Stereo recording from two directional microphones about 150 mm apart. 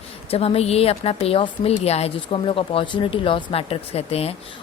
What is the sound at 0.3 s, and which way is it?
A woman's voice, 40° left (ahead or behind).